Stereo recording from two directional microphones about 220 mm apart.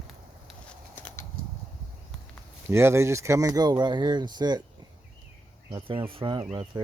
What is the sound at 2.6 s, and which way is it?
Speech, 10° right (ahead or behind).